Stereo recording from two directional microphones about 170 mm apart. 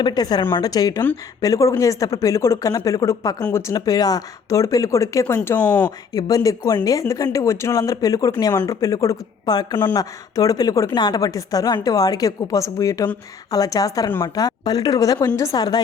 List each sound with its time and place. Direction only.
0.0 s speech: 25° left (ahead or behind); by 5.9 s 10° left (ahead or behind)
6.1 s speech: 20° left (ahead or behind)